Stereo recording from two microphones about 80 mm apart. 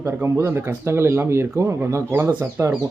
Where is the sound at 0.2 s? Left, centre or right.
Right.